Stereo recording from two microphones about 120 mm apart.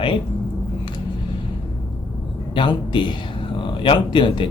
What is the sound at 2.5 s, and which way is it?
Speech, 45° left (ahead or behind).